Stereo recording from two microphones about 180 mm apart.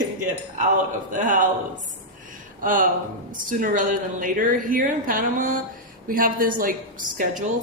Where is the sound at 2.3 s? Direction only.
50° right (ahead or behind).